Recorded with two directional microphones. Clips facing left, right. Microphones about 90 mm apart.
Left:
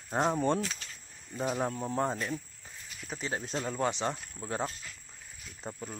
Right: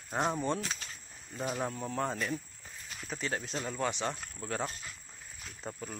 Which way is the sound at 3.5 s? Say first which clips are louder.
Left 3 dB; 30° left (ahead or behind).